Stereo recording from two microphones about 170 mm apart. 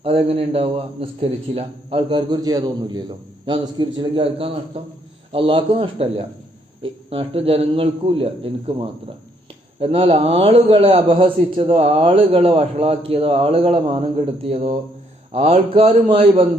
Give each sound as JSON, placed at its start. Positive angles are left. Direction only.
{"t": 0.0, "sound": "a man's voice", "side_deg": -35}
{"t": 9.8, "sound": "a man's voice", "side_deg": -35}